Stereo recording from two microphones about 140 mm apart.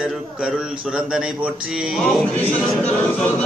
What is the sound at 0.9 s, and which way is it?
A man's voice, 5° right (ahead or behind).